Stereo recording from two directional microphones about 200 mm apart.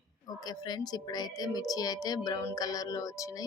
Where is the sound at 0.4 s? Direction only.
20° left (ahead or behind).